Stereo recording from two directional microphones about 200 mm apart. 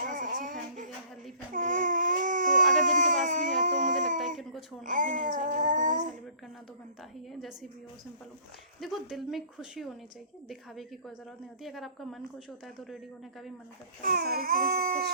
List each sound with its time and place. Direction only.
0.1 s a sound: 40° right (ahead or behind)
1.5 s baby cry: 40° right (ahead or behind)
4.8 s babbling: 40° right (ahead or behind)
8.8 s speech: centre (ahead or behind)
14.0 s baby cry: 50° right (ahead or behind)